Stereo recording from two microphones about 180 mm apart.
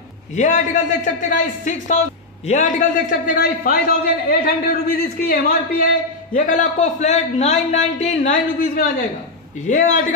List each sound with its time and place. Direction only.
0.4 s a man's voice: 45° left (ahead or behind)